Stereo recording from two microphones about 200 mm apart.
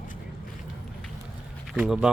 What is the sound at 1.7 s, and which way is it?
Speech, 5° right (ahead or behind).